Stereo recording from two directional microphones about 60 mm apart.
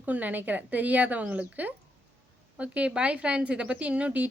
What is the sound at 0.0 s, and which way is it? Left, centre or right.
A woman's voice, right.